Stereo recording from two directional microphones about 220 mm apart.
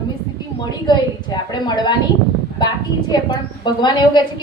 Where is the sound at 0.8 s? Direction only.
20° left (ahead or behind).